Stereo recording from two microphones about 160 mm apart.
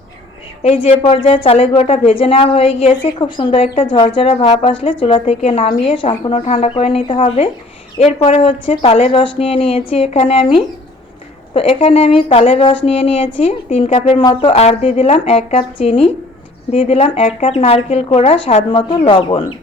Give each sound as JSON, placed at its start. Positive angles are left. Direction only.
{"t": 0.6, "sound": "speech", "side_deg": 40}